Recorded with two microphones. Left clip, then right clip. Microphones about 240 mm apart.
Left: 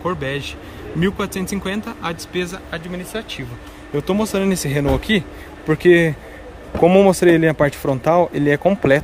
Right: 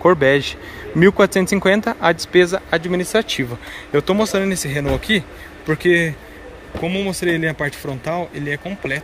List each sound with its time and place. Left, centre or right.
0.0 s speech: centre
3.9 s speech: centre